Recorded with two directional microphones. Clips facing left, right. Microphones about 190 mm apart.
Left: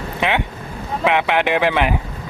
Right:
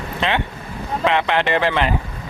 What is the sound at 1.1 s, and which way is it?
Speech, 10° left (ahead or behind).